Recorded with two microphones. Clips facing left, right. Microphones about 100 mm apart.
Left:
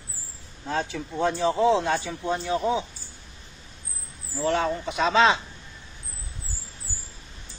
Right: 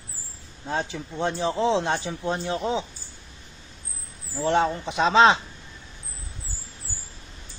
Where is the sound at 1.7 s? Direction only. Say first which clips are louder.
Left 1 dB; 25° right (ahead or behind).